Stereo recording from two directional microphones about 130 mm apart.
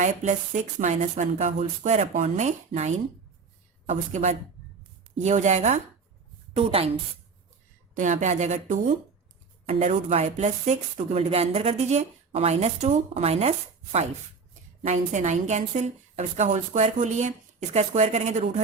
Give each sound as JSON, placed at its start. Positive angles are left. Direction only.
{"t": 0.0, "sound": "a woman's voice", "side_deg": -70}
{"t": 6.5, "sound": "a woman's voice", "side_deg": -50}
{"t": 7.9, "sound": "a woman's voice", "side_deg": -70}
{"t": 14.8, "sound": "a woman's voice", "side_deg": -65}